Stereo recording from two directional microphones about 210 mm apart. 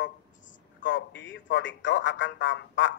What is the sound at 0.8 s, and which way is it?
A man's voice, 60° left (ahead or behind).